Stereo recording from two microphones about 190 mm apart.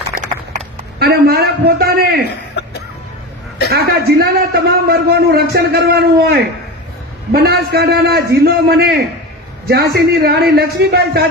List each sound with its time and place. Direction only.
0.1 s a sound: 50° right (ahead or behind)
0.9 s a man's voice: 55° right (ahead or behind)
3.7 s a man's voice: 55° right (ahead or behind)